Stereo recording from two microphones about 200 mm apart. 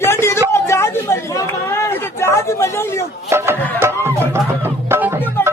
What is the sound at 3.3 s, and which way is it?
Music, 10° right (ahead or behind).